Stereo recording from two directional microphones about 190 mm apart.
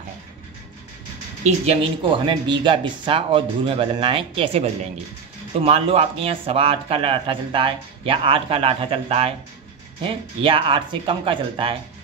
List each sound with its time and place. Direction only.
1.4 s speech: 30° right (ahead or behind)